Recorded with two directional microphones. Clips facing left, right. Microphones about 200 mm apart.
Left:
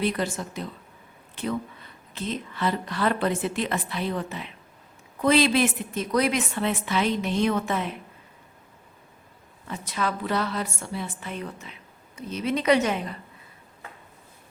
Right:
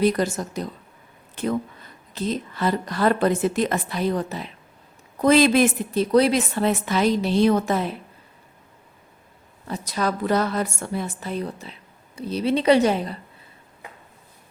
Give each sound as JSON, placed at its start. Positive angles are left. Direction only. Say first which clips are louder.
{"t": 0.0, "sound": "a woman's voice", "louder": "right 6 dB", "side_deg": -40}
{"t": 6.0, "sound": "a woman's voice", "louder": "right 6 dB", "side_deg": -30}
{"t": 9.6, "sound": "a woman's voice", "louder": "right 4 dB", "side_deg": -40}